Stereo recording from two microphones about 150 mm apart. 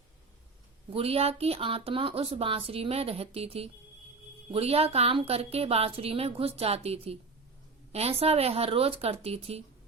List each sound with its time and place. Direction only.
0.9 s speech: 40° right (ahead or behind)